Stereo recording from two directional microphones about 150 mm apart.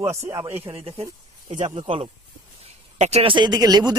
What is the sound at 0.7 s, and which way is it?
Speech, 40° right (ahead or behind).